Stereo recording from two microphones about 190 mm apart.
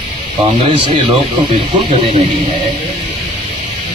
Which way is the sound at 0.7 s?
30° right (ahead or behind).